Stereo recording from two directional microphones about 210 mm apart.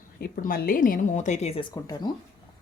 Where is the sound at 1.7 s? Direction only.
20° left (ahead or behind).